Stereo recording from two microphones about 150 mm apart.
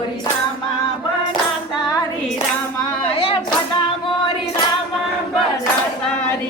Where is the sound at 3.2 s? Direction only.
35° left (ahead or behind).